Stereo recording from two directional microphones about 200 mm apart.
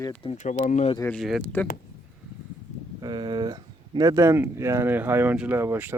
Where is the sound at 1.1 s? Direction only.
Centre (ahead or behind).